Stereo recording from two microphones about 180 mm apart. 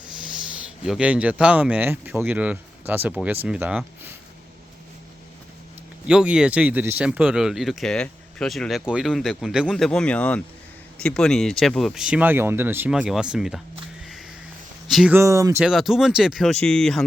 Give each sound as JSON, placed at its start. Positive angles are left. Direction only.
{"t": 0.9, "sound": "speech", "side_deg": -5}
{"t": 6.1, "sound": "speech", "side_deg": -5}
{"t": 14.8, "sound": "speech", "side_deg": 0}
{"t": 15.1, "sound": "speech", "side_deg": -15}
{"t": 15.6, "sound": "speech", "side_deg": 0}